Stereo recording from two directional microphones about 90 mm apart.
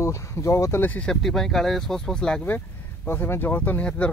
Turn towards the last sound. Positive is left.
turn(degrees=15)  # may be behind; listen again after turning